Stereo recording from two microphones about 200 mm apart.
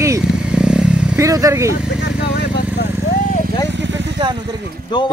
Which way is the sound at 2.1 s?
60° left (ahead or behind).